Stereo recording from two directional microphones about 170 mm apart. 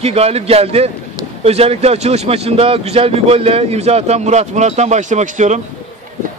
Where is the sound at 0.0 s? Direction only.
35° right (ahead or behind).